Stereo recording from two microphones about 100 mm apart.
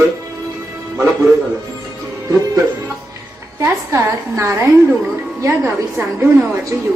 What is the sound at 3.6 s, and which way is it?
A woman's voice, 25° right (ahead or behind).